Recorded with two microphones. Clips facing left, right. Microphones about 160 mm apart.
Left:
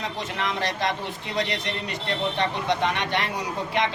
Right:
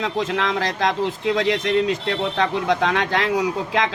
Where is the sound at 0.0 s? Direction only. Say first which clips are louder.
Right 7 dB; 90° right.